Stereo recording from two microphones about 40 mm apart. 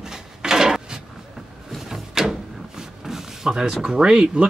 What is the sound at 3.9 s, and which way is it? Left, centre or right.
Speech, centre.